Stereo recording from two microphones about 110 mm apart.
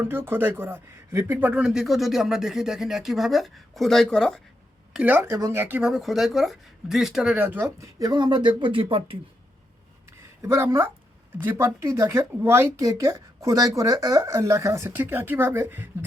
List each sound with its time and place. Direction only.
0.0 s speech: 20° right (ahead or behind); by 4.4 s 5° left (ahead or behind)
4.9 s speech: 15° right (ahead or behind)
5.9 s speech: centre (ahead or behind); by 9.1 s 55° right (ahead or behind)
10.1 s a sound: 25° right (ahead or behind)
11.5 s speech: 30° right (ahead or behind)